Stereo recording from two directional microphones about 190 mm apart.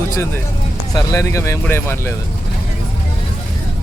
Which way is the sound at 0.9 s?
15° left (ahead or behind).